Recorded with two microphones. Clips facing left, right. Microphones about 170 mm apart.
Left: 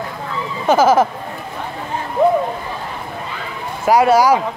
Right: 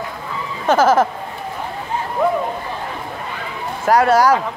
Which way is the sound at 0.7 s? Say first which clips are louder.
Left 1 dB; 5° left (ahead or behind).